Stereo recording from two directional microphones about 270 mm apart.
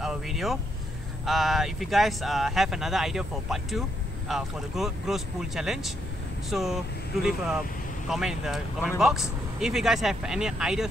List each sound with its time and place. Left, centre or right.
0.0 s speech: centre
8.1 s speech: centre